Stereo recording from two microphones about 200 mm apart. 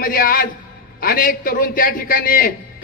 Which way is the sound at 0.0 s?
45° left (ahead or behind).